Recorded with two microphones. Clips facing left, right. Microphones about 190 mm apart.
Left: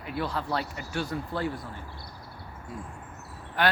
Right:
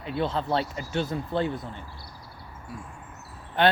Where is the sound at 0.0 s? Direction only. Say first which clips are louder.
Right 4 dB; 25° right (ahead or behind).